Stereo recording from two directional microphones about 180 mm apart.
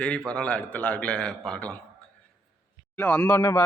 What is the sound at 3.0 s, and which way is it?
Speech, 10° left (ahead or behind).